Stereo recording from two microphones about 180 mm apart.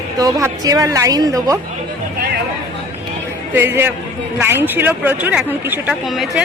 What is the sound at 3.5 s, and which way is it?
A woman's voice, 10° right (ahead or behind).